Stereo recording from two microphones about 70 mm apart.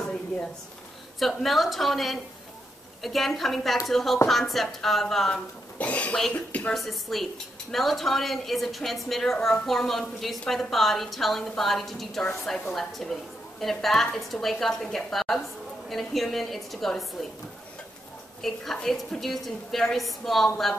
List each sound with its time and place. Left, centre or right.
1.2 s a woman's voice: centre
5.8 s speech: left
6.7 s a woman's voice: centre
18.4 s a woman's voice: centre